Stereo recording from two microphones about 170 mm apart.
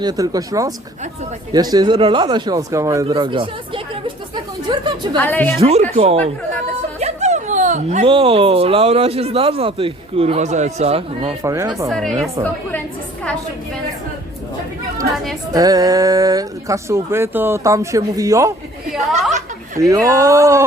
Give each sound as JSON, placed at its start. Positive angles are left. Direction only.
{"t": 0.0, "sound": "speech", "side_deg": -20}
{"t": 2.0, "sound": "speech", "side_deg": -35}
{"t": 2.2, "sound": "speech", "side_deg": -25}
{"t": 5.1, "sound": "a woman's voice", "side_deg": 10}
{"t": 5.5, "sound": "speech", "side_deg": -40}
{"t": 11.4, "sound": "speech", "side_deg": -15}
{"t": 11.9, "sound": "a woman's voice", "side_deg": 5}
{"t": 15.1, "sound": "a woman's voice", "side_deg": 0}
{"t": 15.5, "sound": "speech", "side_deg": -20}
{"t": 18.9, "sound": "chuckle", "side_deg": 0}
{"t": 19.9, "sound": "speech", "side_deg": -20}